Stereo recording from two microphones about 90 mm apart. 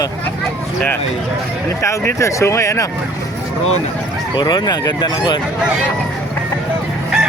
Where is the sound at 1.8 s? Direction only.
35° left (ahead or behind).